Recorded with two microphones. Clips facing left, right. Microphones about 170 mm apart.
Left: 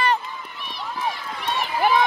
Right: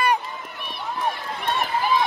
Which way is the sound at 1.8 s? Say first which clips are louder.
Left 4 dB; 60° left (ahead or behind).